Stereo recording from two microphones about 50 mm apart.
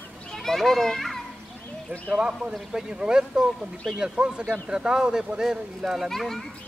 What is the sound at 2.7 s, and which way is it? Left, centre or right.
A man's voice, centre.